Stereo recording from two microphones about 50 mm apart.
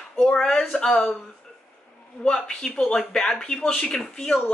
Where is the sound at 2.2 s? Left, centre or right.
Centre.